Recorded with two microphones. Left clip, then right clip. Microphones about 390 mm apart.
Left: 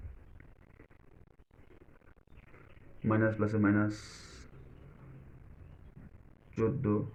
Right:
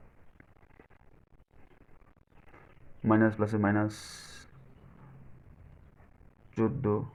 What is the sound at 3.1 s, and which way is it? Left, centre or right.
Speech, right.